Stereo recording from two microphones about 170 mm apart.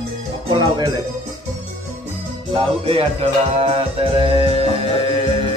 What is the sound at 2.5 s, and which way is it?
Music, 30° right (ahead or behind).